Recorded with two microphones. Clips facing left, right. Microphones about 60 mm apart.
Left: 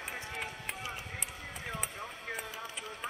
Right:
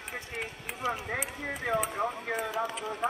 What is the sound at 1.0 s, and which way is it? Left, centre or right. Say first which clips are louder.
Speech: right 9 dB; right.